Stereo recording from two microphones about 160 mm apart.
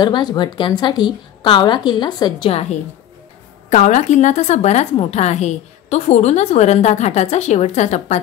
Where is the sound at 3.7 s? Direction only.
50° left (ahead or behind).